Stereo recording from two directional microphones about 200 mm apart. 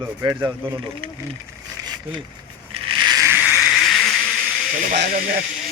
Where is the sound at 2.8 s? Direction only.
25° right (ahead or behind); by 3.9 s 5° right (ahead or behind).